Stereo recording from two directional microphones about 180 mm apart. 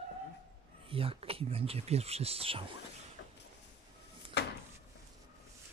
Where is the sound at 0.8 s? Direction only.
30° right (ahead or behind).